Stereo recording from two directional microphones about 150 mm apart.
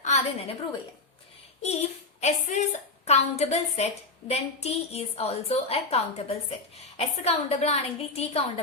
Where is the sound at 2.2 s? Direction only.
50° left (ahead or behind).